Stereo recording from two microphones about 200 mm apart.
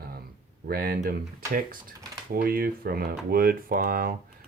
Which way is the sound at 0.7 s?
50° right (ahead or behind).